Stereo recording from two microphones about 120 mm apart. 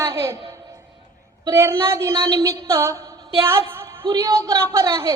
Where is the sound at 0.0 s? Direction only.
25° right (ahead or behind).